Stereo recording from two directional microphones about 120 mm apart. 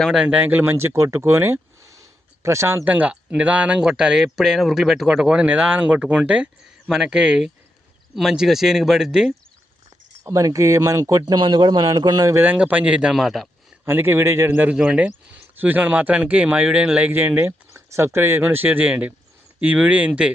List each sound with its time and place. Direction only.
0.0 s speech: 5° right (ahead or behind)
10.2 s speech: 25° right (ahead or behind)
12.4 s speech: 15° right (ahead or behind)
13.8 s speech: 20° right (ahead or behind)